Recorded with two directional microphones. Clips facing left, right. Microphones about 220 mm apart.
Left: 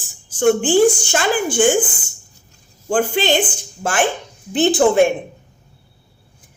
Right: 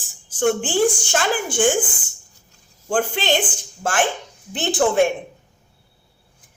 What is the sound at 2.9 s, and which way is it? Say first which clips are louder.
Speech: left 4 dB; centre (ahead or behind).